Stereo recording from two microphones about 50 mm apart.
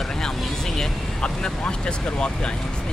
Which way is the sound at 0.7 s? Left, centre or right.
Centre.